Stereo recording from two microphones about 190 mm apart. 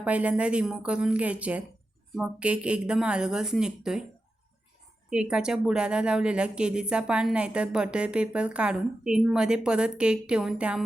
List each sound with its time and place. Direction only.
0.0 s speech: 5° right (ahead or behind)
5.0 s speech: 5° right (ahead or behind)